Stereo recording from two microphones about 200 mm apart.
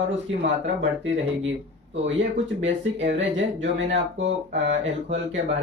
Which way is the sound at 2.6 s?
65° right (ahead or behind).